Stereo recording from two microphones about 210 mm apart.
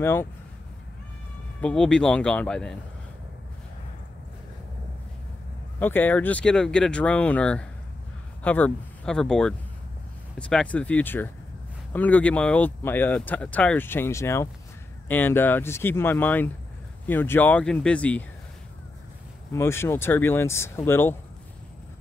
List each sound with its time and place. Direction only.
0.0 s speech: 10° left (ahead or behind)
1.6 s speech: 5° left (ahead or behind)
5.8 s speech: 10° left (ahead or behind)
19.5 s speech: 10° left (ahead or behind)